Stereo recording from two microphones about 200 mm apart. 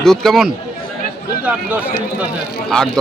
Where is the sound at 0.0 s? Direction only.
Centre (ahead or behind).